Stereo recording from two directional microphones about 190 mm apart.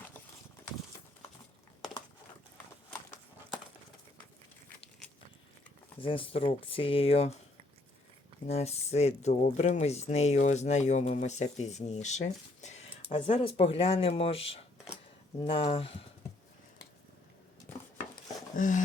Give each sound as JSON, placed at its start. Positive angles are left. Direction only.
{"t": 6.0, "sound": "speech", "side_deg": 25}
{"t": 8.4, "sound": "speech", "side_deg": 35}
{"t": 18.5, "sound": "speech", "side_deg": 40}